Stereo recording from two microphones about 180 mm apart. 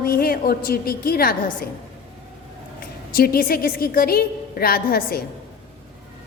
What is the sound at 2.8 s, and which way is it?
A woman's voice, 55° left (ahead or behind).